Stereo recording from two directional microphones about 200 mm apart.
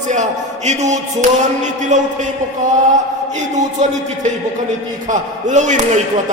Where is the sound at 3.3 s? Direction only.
35° right (ahead or behind).